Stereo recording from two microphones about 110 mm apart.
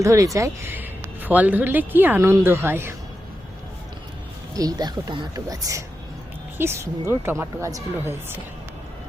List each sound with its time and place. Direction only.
0.0 s a woman's voice: 30° right (ahead or behind)
0.8 s a woman's voice: 15° right (ahead or behind)
4.5 s a woman's voice: 35° right (ahead or behind)